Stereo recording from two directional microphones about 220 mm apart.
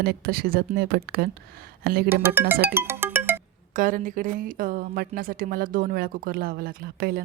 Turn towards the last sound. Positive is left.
turn(degrees=-45)  # may be behind; listen again after turning